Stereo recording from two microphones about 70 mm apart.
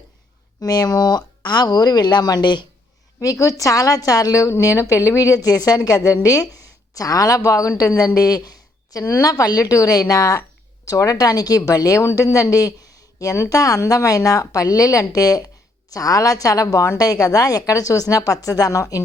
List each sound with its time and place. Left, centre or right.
0.6 s speech: left
1.5 s a woman's voice: left
3.2 s speech: left